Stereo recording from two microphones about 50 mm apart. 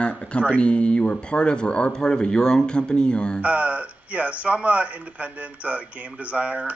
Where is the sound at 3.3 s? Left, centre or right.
Right.